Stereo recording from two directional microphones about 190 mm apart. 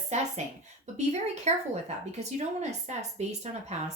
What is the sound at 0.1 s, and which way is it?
Speech, 35° right (ahead or behind).